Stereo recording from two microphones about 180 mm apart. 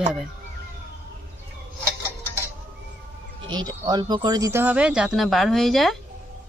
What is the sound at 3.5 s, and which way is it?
Speech, 25° right (ahead or behind).